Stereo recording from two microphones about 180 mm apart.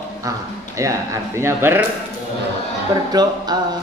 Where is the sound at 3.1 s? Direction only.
20° right (ahead or behind).